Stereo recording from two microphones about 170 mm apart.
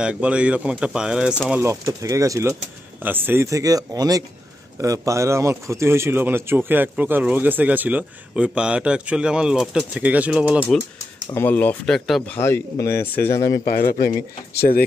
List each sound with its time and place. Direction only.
0.0 s speech: 5° right (ahead or behind)
1.5 s a man's voice: 15° right (ahead or behind)
11.2 s speech: 15° left (ahead or behind)
12.4 s speech: 15° left (ahead or behind)
13.7 s a man's voice: 60° left (ahead or behind)